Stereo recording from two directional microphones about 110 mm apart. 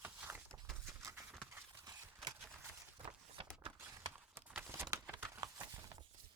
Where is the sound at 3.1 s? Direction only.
55° right (ahead or behind).